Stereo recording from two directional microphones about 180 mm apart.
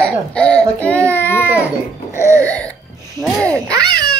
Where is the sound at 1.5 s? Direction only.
5° right (ahead or behind).